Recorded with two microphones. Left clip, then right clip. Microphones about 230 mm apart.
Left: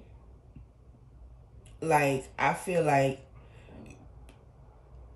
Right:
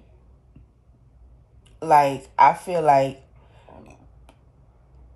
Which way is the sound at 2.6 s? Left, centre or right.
Centre.